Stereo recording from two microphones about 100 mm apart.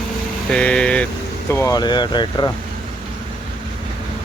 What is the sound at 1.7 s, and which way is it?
Speech, 45° left (ahead or behind).